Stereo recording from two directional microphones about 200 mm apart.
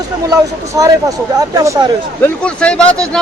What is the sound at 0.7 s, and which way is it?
Speech, 15° right (ahead or behind).